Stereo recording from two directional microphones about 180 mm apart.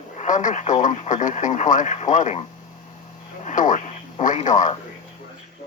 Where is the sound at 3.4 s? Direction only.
45° left (ahead or behind).